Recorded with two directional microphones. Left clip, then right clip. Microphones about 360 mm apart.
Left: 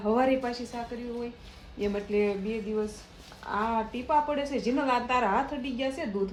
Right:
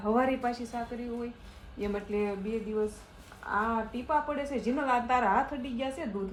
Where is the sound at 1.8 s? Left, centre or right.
Centre.